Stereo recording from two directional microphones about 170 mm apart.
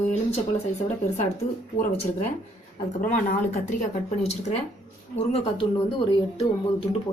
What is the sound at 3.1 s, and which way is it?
Speech, 45° left (ahead or behind).